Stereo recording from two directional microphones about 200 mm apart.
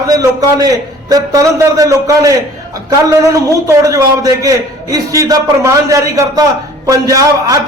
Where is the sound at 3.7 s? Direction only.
15° right (ahead or behind).